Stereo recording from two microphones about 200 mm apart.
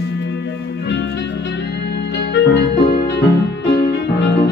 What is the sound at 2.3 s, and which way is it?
Music, 60° left (ahead or behind).